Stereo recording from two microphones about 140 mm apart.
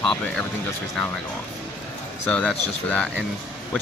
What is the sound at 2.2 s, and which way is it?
Speech, 10° left (ahead or behind).